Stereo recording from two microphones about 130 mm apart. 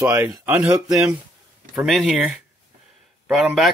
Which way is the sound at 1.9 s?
Centre (ahead or behind).